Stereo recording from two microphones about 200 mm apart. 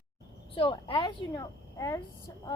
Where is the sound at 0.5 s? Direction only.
25° left (ahead or behind).